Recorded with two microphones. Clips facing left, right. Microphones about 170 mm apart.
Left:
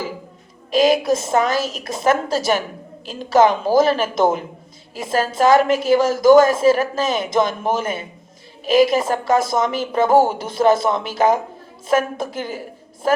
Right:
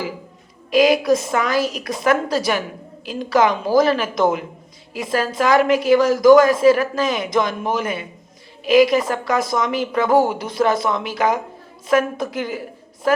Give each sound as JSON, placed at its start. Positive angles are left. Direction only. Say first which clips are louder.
{"t": 0.7, "sound": "a woman's voice", "louder": "right 1 dB", "side_deg": 25}